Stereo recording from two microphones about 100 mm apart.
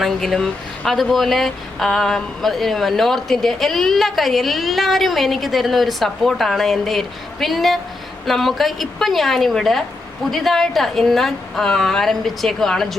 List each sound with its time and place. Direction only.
0.0 s speech: centre (ahead or behind)